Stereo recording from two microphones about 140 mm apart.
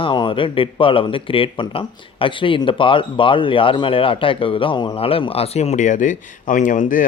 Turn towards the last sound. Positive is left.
turn(degrees=70)  # may be behind; listen again after turning